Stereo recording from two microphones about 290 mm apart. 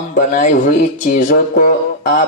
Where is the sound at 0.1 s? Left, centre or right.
Left.